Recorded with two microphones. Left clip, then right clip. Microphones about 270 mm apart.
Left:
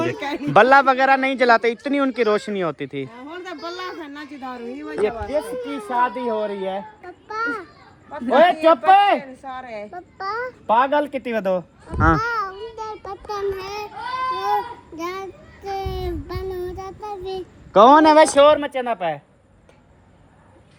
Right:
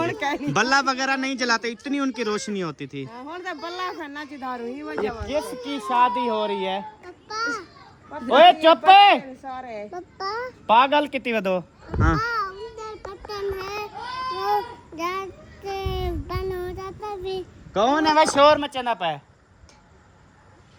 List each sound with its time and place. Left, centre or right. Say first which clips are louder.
0.0 s speech: left 1 dB; centre
5.6 s speech: right 5 dB; centre
7.3 s children playing: left 2 dB; centre
8.3 s speech: right 1 dB; centre
9.4 s a sound: left 2 dB; left
9.9 s a child's voice: left 2 dB; right
10.7 s a child's voice: even; centre
18.3 s speech: left 3 dB; right